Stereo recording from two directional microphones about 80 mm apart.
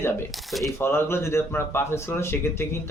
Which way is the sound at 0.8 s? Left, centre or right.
Left.